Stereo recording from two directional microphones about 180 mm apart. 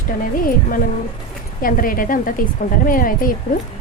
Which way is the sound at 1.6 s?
50° left (ahead or behind).